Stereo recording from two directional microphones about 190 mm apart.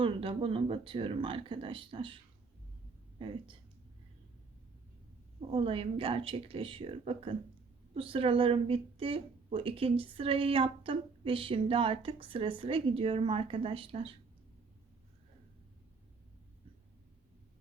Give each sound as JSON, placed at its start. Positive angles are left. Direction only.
{"t": 0.0, "sound": "a woman's voice", "side_deg": -30}
{"t": 3.2, "sound": "a woman's voice", "side_deg": -25}
{"t": 5.5, "sound": "a woman's voice", "side_deg": -30}